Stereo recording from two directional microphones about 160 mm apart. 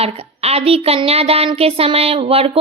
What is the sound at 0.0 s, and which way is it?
Speech, 40° right (ahead or behind).